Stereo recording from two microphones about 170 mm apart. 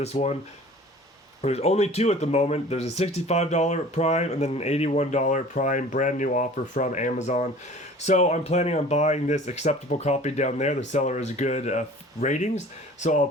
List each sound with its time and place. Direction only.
0.0 s speech: 40° left (ahead or behind)
1.4 s speech: 40° left (ahead or behind)